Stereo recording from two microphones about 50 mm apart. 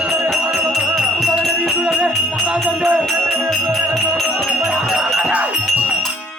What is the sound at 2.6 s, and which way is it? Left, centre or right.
Music, centre.